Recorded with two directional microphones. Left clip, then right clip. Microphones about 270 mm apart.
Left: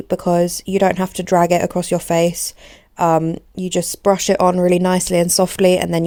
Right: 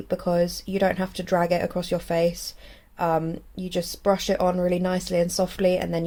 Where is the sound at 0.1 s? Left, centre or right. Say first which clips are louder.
Left 7 dB; left.